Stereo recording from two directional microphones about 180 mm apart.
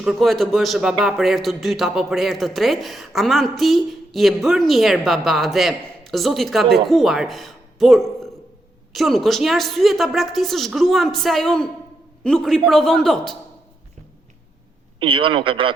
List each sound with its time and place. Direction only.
0.0 s speech: centre (ahead or behind)
14.9 s speech: 30° right (ahead or behind)